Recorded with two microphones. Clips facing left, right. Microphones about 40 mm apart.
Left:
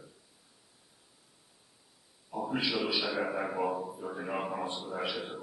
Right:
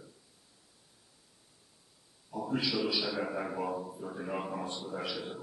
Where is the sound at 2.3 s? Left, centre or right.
Centre.